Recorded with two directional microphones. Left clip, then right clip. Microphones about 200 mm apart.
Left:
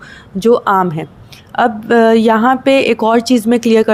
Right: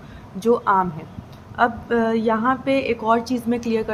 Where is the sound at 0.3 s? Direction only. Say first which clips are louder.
Left 7 dB; 35° left (ahead or behind).